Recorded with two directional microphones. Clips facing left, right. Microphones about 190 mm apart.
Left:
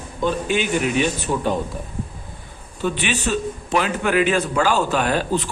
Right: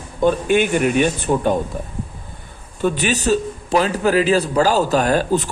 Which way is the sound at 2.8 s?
40° right (ahead or behind).